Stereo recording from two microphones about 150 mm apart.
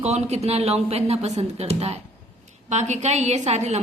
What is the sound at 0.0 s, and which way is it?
A woman's voice, 45° right (ahead or behind).